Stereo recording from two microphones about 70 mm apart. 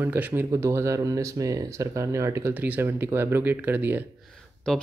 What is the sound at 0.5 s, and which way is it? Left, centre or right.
Speech, right.